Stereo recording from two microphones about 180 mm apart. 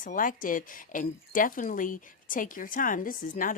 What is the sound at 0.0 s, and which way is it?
Speech, 45° left (ahead or behind).